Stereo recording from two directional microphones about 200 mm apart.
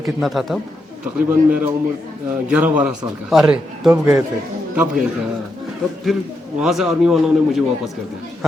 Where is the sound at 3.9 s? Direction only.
15° right (ahead or behind).